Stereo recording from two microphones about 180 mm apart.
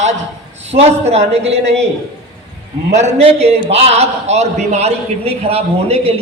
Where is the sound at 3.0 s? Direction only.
35° right (ahead or behind).